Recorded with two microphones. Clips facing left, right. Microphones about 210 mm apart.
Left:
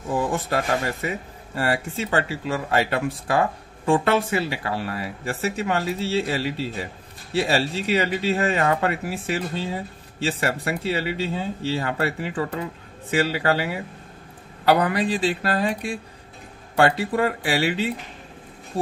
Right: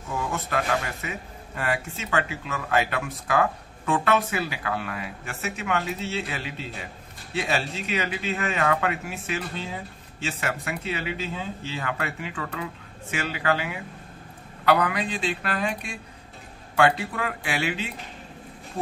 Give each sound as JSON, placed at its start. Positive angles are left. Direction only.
{"t": 0.1, "sound": "speech", "side_deg": 35}